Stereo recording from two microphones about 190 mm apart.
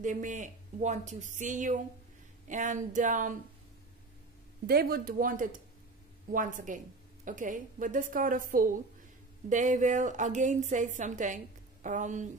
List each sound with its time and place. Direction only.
0.0 s a woman's voice: 40° right (ahead or behind)
4.6 s a woman's voice: 55° right (ahead or behind)